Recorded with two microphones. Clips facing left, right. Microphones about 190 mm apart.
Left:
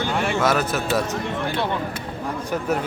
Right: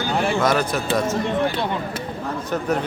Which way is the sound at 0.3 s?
5° left (ahead or behind).